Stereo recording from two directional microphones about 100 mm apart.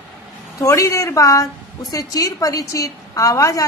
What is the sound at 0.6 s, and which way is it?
A woman's voice, 30° left (ahead or behind).